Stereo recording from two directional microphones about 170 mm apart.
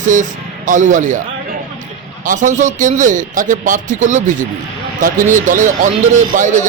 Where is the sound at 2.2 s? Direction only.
50° right (ahead or behind).